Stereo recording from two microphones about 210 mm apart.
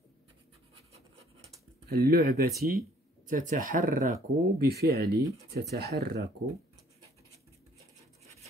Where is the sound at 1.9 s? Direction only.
50° right (ahead or behind).